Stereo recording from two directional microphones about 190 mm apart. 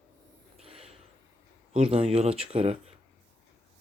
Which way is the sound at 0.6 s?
30° right (ahead or behind).